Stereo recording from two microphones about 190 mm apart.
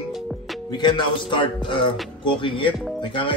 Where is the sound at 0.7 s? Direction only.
25° left (ahead or behind).